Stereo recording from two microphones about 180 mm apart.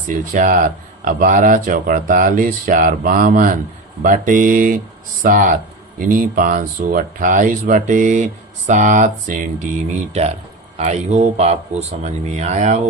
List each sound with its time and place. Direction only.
0.1 s speech: 45° right (ahead or behind)
10.8 s speech: 40° right (ahead or behind)